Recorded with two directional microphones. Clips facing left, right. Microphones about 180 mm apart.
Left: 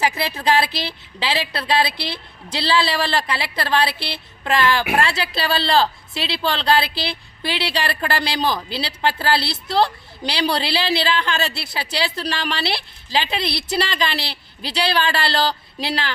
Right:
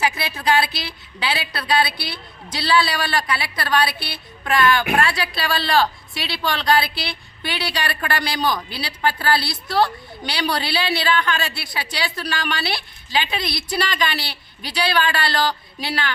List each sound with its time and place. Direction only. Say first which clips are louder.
0.0 s speech: left 2 dB; 30° left (ahead or behind)
2.6 s speech: even; 30° left (ahead or behind)